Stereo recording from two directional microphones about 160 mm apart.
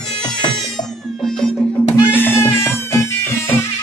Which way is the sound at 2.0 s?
10° left (ahead or behind).